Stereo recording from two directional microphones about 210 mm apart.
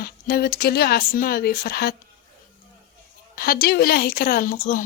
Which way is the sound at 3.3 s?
45° left (ahead or behind).